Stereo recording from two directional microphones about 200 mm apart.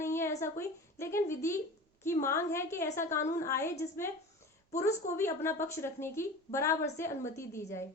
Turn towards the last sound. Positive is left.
turn(degrees=15)  # may be behind; listen again after turning